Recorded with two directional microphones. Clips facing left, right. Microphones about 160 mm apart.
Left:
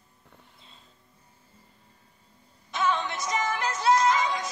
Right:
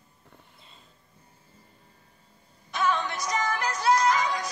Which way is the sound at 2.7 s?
20° left (ahead or behind).